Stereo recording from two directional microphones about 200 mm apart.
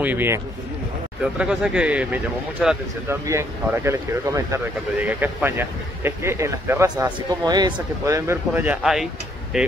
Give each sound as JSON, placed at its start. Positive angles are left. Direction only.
{"t": 0.0, "sound": "speech", "side_deg": -10}
{"t": 3.3, "sound": "speech", "side_deg": -15}